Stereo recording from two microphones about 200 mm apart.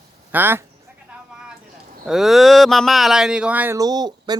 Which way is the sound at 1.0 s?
5° right (ahead or behind).